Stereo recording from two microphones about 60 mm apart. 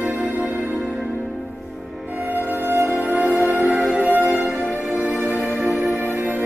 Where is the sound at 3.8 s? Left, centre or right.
Centre.